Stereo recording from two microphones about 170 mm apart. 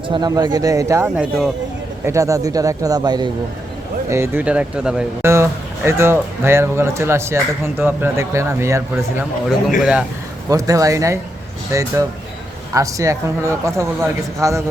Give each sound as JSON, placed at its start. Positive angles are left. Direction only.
{"t": 0.1, "sound": "speech", "side_deg": -20}
{"t": 1.1, "sound": "speech", "side_deg": -5}
{"t": 2.0, "sound": "speech", "side_deg": -20}
{"t": 4.1, "sound": "speech", "side_deg": -15}
{"t": 5.2, "sound": "speech", "side_deg": -15}
{"t": 9.8, "sound": "speech", "side_deg": -5}
{"t": 10.5, "sound": "speech", "side_deg": -20}